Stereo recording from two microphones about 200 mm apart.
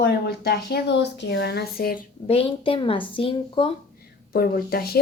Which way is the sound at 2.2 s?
30° left (ahead or behind).